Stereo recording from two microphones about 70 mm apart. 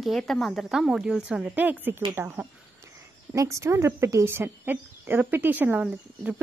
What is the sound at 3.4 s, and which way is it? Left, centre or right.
A woman's voice, right.